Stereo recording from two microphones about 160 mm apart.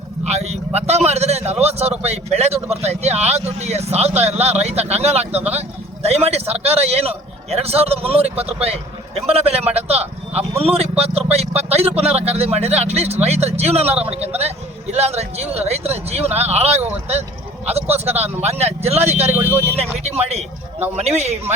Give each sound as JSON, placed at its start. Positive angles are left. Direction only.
{"t": 0.3, "sound": "vehicle", "side_deg": -45}
{"t": 0.9, "sound": "a sound", "side_deg": -40}
{"t": 2.0, "sound": "a man's voice", "side_deg": -40}
{"t": 19.3, "sound": "speech", "side_deg": -15}
{"t": 19.7, "sound": "speech", "side_deg": -40}